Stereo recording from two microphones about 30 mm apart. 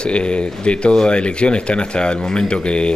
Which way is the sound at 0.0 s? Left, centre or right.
Left.